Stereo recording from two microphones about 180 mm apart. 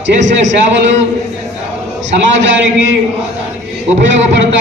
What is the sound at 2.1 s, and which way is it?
Speech, 90° right.